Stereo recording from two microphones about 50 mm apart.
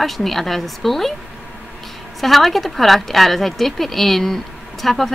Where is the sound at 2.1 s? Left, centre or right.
Centre.